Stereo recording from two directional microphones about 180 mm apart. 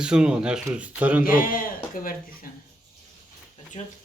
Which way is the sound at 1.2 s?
50° left (ahead or behind).